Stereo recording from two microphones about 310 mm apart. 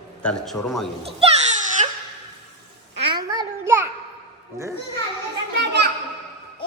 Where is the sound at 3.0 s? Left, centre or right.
Centre.